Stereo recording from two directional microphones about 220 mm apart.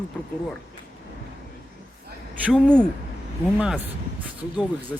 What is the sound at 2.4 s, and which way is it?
Speech, centre (ahead or behind).